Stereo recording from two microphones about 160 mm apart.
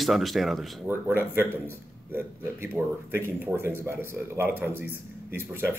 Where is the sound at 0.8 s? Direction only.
15° right (ahead or behind).